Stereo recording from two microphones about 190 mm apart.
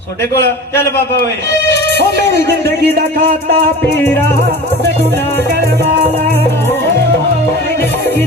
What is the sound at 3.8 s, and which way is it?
A man's voice, 10° left (ahead or behind).